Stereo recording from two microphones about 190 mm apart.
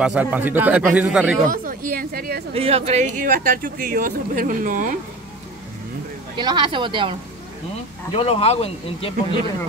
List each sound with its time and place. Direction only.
0.0 s speech: 5° right (ahead or behind)
1.5 s speech: 50° right (ahead or behind)
2.5 s speech: 30° right (ahead or behind)
6.3 s speech: 25° right (ahead or behind)
8.1 s speech: 30° left (ahead or behind)